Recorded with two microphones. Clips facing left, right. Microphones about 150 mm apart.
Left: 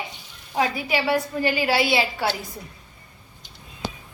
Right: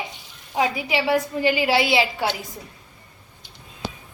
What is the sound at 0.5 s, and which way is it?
A woman's voice, 20° right (ahead or behind).